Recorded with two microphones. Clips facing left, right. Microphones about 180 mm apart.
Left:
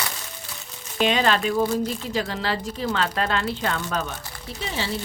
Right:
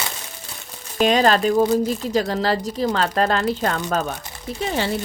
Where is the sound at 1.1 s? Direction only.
40° right (ahead or behind).